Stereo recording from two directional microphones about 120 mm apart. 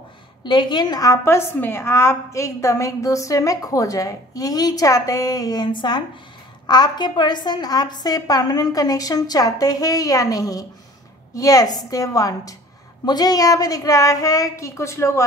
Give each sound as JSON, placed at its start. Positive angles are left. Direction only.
{"t": 0.4, "sound": "a woman's voice", "side_deg": 40}